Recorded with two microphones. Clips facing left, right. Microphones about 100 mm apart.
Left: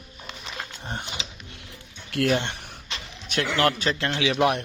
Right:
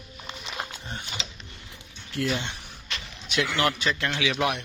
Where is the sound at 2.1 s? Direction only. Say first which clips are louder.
Left 5 dB; 60° left (ahead or behind).